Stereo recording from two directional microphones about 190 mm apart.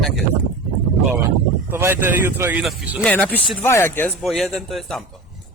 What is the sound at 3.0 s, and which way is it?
Speech, 10° left (ahead or behind).